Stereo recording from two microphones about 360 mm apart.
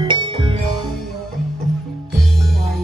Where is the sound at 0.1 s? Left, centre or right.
Centre.